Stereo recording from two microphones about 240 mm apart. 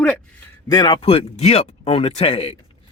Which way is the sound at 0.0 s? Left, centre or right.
Centre.